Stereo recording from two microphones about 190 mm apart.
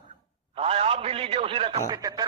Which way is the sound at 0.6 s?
30° right (ahead or behind).